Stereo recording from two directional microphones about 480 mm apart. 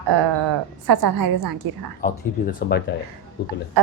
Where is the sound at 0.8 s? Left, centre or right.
Right.